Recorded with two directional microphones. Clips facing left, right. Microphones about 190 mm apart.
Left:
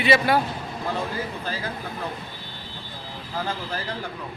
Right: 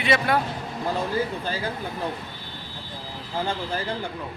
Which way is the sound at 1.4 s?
30° right (ahead or behind).